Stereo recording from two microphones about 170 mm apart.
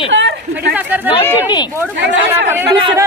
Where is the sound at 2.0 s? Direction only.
90° right.